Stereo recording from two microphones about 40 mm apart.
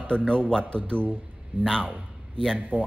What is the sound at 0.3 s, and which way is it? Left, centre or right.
A man's voice, left.